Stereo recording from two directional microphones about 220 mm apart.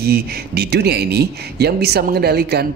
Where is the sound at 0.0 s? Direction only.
45° right (ahead or behind).